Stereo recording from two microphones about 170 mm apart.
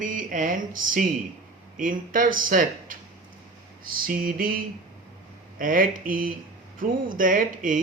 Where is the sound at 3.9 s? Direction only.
55° right (ahead or behind).